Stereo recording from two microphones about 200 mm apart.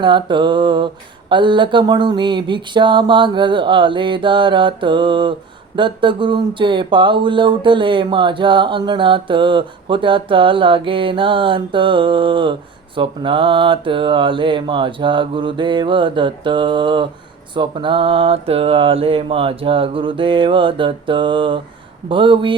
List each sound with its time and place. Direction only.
0.0 s speech: 25° right (ahead or behind)